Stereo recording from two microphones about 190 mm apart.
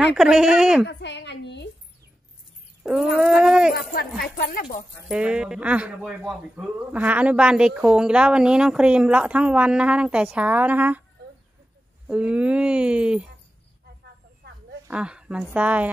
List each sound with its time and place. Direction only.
0.1 s speech: 5° right (ahead or behind)
0.8 s a sound: 65° left (ahead or behind)
2.8 s dog: 5° right (ahead or behind)
3.2 s speech: centre (ahead or behind)
3.7 s speech: 55° left (ahead or behind)
5.0 s speech: 5° right (ahead or behind)
12.1 s speech: 5° right (ahead or behind)
14.4 s a sound: 55° right (ahead or behind)
14.9 s a woman's voice: 5° right (ahead or behind)